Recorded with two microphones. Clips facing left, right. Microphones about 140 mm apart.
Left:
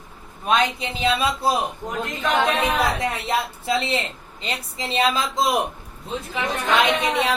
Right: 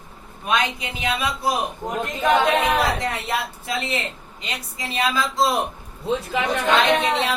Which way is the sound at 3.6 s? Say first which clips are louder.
Left 3 dB; 30° left (ahead or behind).